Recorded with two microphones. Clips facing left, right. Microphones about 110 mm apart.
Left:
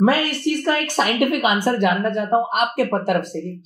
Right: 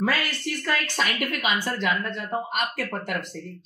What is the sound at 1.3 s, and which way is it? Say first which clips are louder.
Speech: left 8 dB; 45° left (ahead or behind).